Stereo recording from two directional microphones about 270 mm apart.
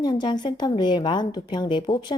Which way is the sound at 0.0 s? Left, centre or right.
Centre.